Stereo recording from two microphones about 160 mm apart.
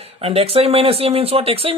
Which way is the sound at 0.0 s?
40° right (ahead or behind).